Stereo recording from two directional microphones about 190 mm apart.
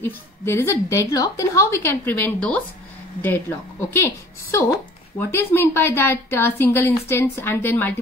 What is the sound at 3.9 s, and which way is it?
A woman's voice, 15° left (ahead or behind).